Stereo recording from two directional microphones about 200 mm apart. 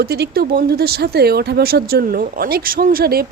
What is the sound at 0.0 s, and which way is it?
Speech, 50° right (ahead or behind).